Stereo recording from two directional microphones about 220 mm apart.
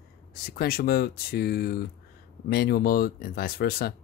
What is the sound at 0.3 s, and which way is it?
Speech, 45° left (ahead or behind).